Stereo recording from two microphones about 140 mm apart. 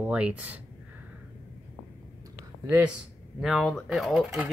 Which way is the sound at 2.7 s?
10° right (ahead or behind).